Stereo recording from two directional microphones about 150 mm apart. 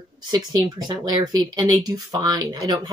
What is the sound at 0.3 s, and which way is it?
Speech, 25° right (ahead or behind).